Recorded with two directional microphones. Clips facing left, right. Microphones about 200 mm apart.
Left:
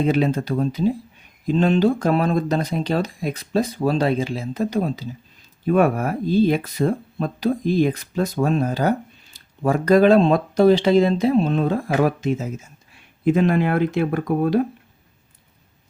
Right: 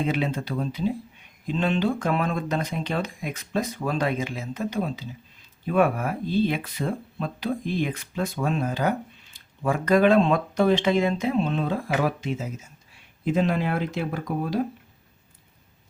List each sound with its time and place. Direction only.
0.0 s speech: 40° left (ahead or behind)
13.2 s speech: 60° left (ahead or behind)